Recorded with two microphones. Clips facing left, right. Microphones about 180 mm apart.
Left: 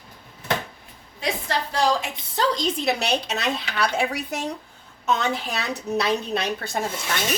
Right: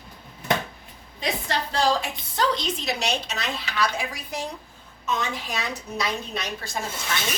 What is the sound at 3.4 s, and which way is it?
A woman's voice, 65° left (ahead or behind).